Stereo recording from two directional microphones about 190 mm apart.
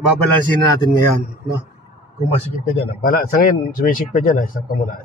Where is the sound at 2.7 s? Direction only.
50° left (ahead or behind).